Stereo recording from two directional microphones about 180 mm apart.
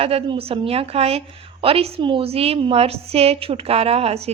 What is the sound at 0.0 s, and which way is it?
A woman's voice, 35° right (ahead or behind).